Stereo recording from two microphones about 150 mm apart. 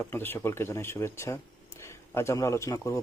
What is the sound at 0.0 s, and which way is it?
Speech, 15° left (ahead or behind).